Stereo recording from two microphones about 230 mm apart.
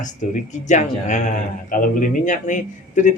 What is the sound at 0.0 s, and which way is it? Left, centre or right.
Speech, left.